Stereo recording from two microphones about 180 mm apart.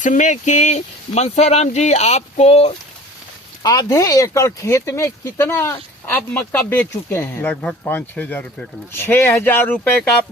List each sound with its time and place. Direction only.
0.0 s speech: 45° left (ahead or behind)
3.6 s speech: 20° left (ahead or behind)